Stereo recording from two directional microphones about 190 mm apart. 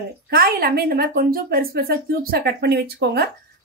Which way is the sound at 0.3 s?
50° right (ahead or behind).